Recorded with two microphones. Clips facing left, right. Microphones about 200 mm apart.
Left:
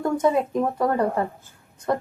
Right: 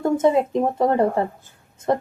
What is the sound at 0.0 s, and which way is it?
Speech, 25° right (ahead or behind).